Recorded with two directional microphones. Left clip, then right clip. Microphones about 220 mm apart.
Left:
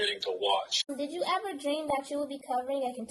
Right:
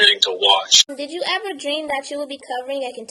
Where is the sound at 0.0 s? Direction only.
15° right (ahead or behind).